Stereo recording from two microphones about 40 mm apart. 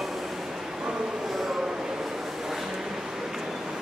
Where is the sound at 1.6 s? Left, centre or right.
Centre.